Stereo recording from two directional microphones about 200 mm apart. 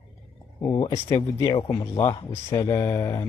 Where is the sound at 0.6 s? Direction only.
20° left (ahead or behind).